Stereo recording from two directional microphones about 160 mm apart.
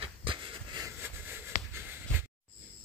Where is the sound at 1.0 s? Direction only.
15° right (ahead or behind).